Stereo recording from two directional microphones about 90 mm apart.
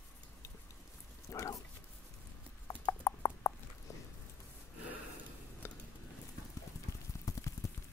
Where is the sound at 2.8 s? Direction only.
45° left (ahead or behind).